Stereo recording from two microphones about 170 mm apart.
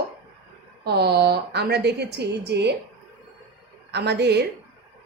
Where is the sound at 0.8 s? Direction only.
70° right (ahead or behind).